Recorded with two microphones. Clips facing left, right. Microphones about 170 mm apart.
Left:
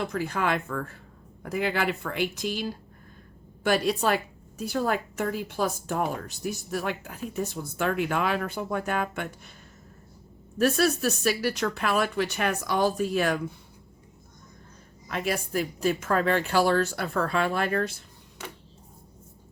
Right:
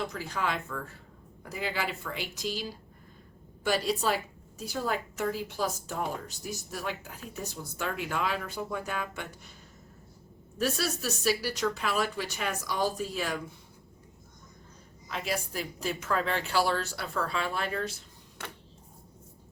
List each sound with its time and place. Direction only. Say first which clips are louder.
0.0 s a woman's voice: left 5 dB; 55° left (ahead or behind)
10.6 s a woman's voice: left 8 dB; 60° left (ahead or behind)
15.1 s a woman's voice: left 5 dB; 55° left (ahead or behind)